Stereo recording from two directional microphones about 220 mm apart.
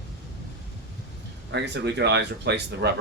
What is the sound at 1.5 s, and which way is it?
Speech, 50° right (ahead or behind).